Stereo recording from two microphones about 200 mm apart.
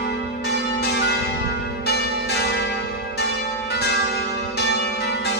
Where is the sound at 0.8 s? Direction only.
55° left (ahead or behind).